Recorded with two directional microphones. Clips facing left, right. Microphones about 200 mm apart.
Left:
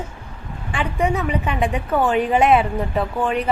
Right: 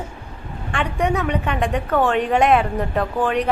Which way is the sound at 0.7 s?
Centre (ahead or behind).